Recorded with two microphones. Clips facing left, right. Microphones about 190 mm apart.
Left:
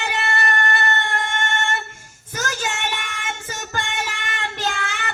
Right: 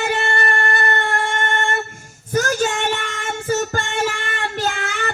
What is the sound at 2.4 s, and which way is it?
Music, 50° right (ahead or behind).